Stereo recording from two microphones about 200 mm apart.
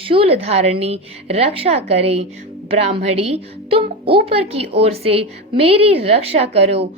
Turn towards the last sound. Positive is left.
turn(degrees=-30)  # may be behind; listen again after turning